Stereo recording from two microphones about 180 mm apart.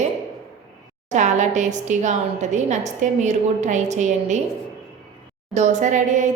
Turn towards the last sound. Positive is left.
turn(degrees=-45)  # may be behind; listen again after turning